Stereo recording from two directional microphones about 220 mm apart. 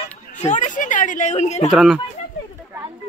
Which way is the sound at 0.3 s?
35° left (ahead or behind).